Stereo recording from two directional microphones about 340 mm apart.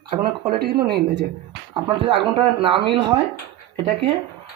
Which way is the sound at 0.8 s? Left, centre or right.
Right.